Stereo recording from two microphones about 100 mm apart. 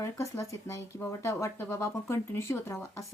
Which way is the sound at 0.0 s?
30° left (ahead or behind).